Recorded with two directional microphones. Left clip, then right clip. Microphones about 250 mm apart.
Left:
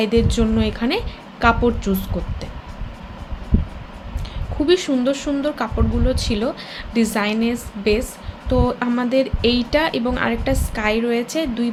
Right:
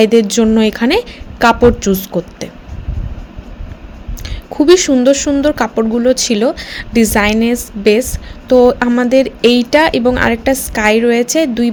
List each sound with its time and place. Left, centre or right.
0.0 s a woman's voice: right
4.6 s a woman's voice: right